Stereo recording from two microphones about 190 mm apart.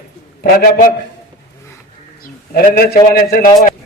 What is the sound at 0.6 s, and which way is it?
Speech, 55° left (ahead or behind).